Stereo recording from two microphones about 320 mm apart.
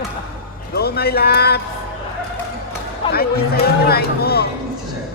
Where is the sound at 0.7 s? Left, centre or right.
Left.